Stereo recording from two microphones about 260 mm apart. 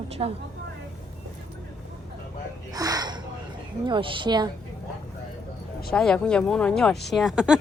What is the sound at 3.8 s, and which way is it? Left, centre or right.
Speech, centre.